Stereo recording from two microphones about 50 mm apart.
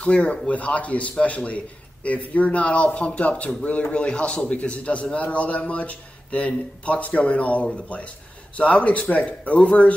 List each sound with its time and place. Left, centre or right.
0.0 s speech: left